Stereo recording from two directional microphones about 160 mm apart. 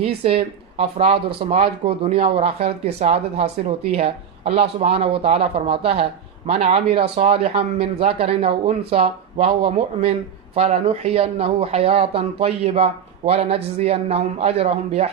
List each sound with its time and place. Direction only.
0.0 s speech: 35° right (ahead or behind)